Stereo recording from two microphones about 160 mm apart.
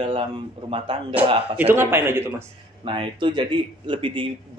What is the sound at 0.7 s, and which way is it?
Speech, 30° right (ahead or behind).